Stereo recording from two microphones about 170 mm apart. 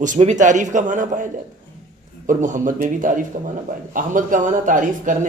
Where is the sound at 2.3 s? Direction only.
50° right (ahead or behind).